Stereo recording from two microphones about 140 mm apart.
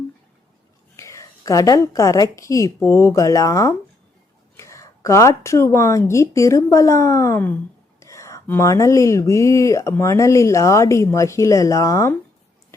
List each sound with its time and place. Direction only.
0.9 s speech: 20° left (ahead or behind)